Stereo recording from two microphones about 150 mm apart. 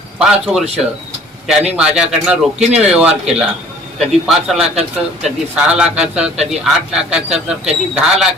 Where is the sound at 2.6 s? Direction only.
45° right (ahead or behind).